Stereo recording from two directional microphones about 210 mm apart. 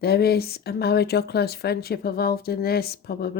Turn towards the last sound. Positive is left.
turn(degrees=50)  # may be behind; listen again after turning